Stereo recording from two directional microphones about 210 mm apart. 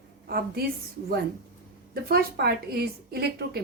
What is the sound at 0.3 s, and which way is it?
Speech, 45° right (ahead or behind).